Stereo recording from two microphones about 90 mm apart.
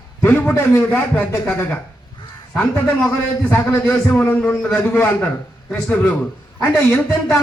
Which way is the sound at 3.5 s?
25° left (ahead or behind).